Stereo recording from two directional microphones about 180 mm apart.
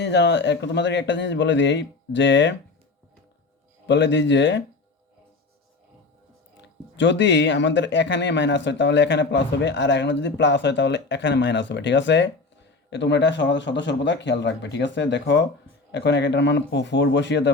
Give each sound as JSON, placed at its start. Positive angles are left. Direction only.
{"t": 0.0, "sound": "a man's voice", "side_deg": 75}
{"t": 3.8, "sound": "a man's voice", "side_deg": 75}
{"t": 6.9, "sound": "a man's voice", "side_deg": 90}